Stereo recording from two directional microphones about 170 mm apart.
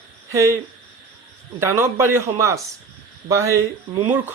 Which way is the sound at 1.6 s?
15° right (ahead or behind).